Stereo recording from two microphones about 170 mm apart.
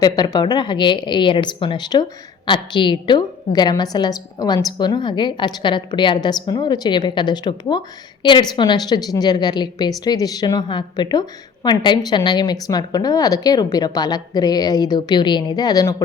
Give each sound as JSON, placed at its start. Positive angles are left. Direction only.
{"t": 0.0, "sound": "a woman's voice", "side_deg": 25}